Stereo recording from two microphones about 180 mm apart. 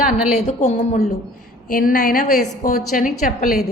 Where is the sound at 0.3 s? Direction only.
35° left (ahead or behind).